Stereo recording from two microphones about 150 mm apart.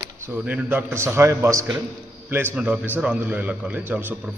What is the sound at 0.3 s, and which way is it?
A man's voice, 10° right (ahead or behind).